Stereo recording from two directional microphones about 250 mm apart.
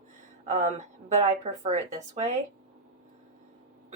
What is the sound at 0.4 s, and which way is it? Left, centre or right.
A woman's voice, right.